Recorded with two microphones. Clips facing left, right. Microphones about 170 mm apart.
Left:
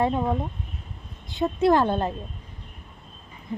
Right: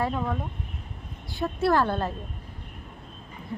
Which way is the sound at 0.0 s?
25° left (ahead or behind).